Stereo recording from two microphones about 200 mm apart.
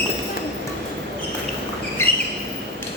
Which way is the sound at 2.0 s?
10° left (ahead or behind).